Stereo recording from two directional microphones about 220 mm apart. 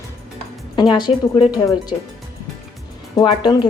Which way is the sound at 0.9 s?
20° left (ahead or behind).